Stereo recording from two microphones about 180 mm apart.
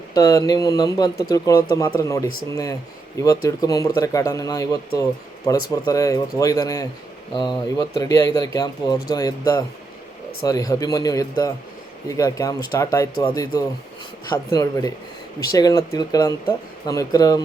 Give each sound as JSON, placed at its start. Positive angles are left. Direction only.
{"t": 0.1, "sound": "speech", "side_deg": 20}